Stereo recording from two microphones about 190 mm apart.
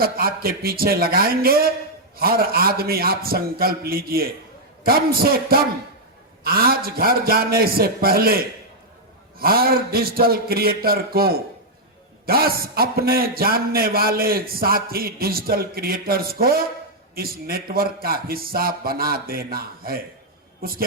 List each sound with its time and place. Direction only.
0.0 s a man's voice: 50° right (ahead or behind)
9.4 s a man's voice: 50° right (ahead or behind)